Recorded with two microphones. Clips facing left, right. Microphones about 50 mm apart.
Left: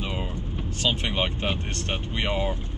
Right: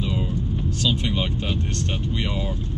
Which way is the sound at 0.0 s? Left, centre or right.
Left.